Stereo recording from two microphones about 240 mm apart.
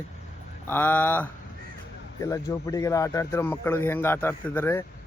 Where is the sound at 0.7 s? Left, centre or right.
Centre.